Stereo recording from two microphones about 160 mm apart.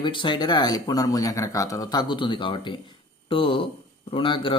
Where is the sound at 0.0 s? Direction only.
30° left (ahead or behind).